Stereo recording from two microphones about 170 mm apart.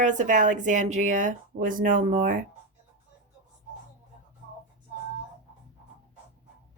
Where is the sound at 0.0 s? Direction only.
45° right (ahead or behind).